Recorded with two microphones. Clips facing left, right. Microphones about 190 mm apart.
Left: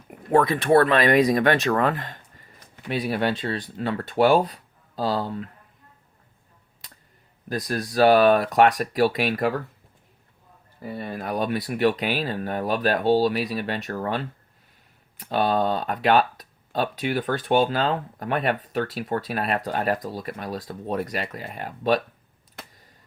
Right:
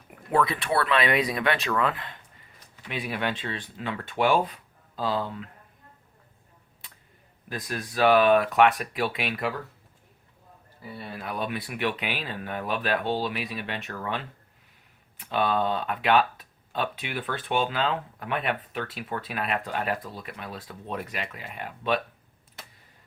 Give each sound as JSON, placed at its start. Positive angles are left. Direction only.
{"t": 0.3, "sound": "speech", "side_deg": 45}
{"t": 7.4, "sound": "speech", "side_deg": 40}
{"t": 10.8, "sound": "speech", "side_deg": 50}